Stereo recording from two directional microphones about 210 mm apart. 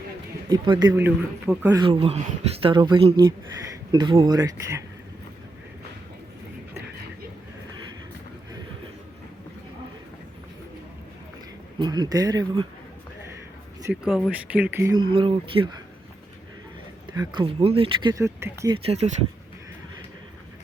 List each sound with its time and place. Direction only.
0.5 s speech: 20° right (ahead or behind)
1.8 s speech: 25° right (ahead or behind)
11.8 s speech: 20° right (ahead or behind)
14.1 s speech: 5° right (ahead or behind); by 15.7 s 25° right (ahead or behind)
17.1 s speech: 20° right (ahead or behind)
18.9 s speech: 30° right (ahead or behind)